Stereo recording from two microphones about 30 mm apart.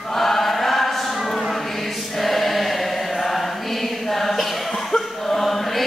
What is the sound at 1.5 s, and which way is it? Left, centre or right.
Choir, centre.